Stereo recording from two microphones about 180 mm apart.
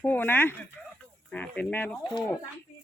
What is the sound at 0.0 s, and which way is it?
Speech, 10° left (ahead or behind).